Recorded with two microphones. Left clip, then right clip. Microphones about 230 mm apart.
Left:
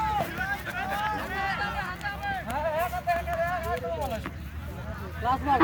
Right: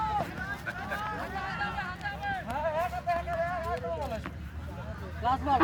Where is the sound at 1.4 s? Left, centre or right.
Right.